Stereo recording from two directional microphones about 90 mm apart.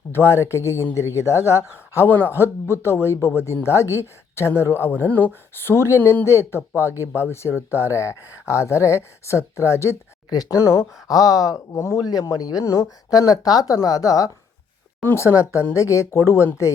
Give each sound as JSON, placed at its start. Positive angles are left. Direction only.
{"t": 0.1, "sound": "speech", "side_deg": 30}
{"t": 15.0, "sound": "speech", "side_deg": 30}